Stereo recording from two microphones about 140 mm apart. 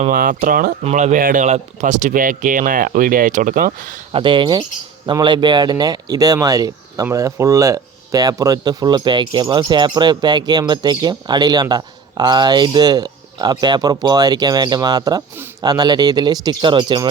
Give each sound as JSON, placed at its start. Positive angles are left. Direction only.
{"t": 0.1, "sound": "speech", "side_deg": -85}
{"t": 0.9, "sound": "speech", "side_deg": -55}
{"t": 4.1, "sound": "speech", "side_deg": -35}